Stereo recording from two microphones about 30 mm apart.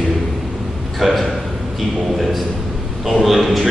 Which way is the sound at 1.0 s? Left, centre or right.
Centre.